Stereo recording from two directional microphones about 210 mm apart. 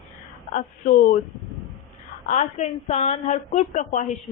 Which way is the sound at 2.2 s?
35° left (ahead or behind).